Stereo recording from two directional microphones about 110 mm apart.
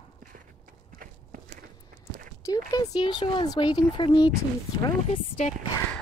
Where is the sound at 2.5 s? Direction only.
35° left (ahead or behind).